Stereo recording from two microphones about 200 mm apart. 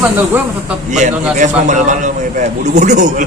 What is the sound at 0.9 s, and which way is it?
A man's voice, 35° right (ahead or behind).